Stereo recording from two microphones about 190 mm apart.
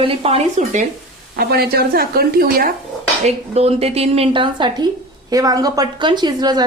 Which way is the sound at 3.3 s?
35° right (ahead or behind).